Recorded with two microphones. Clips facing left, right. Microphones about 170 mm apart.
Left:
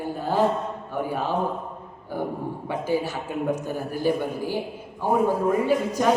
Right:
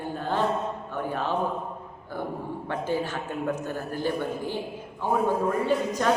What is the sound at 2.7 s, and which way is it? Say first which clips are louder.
A man's voice: left 3 dB; 10° left (ahead or behind).